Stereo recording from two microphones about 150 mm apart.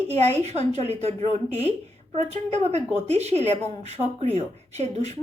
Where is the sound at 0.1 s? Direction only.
45° right (ahead or behind).